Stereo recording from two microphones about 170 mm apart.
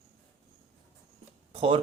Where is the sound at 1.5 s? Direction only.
35° right (ahead or behind).